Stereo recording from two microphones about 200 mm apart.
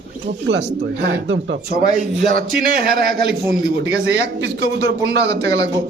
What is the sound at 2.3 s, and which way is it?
A man's voice, 50° right (ahead or behind).